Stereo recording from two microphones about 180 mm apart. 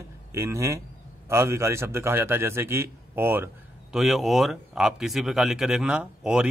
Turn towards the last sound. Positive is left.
turn(degrees=-5)  # may be behind; listen again after turning